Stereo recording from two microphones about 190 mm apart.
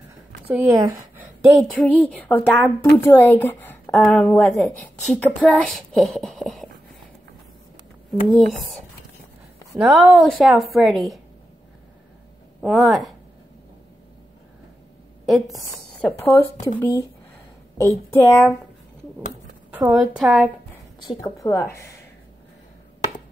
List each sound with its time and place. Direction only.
0.5 s a woman's voice: 10° right (ahead or behind)
1.7 s a woman's voice: 5° left (ahead or behind)
8.1 s a woman's voice: centre (ahead or behind)
9.8 s a woman's voice: 5° right (ahead or behind)
12.6 s a woman's voice: centre (ahead or behind)
15.2 s a woman's voice: centre (ahead or behind)
18.1 s a woman's voice: 10° left (ahead or behind)
19.9 s a woman's voice: centre (ahead or behind)
21.1 s a woman's voice: 20° left (ahead or behind)